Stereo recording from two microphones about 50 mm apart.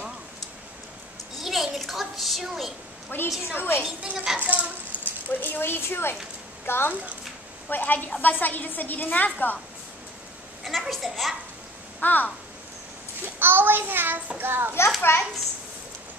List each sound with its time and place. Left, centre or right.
1.4 s a sound: centre
2.4 s a woman's voice: centre
3.1 s speech: left
4.0 s a child's voice: centre
4.4 s a child's voice: right
5.3 s a woman's voice: left
10.6 s a woman's voice: centre
12.0 s a woman's voice: left
13.4 s a child's voice: right
14.4 s a child's voice: right
15.1 s a child's voice: left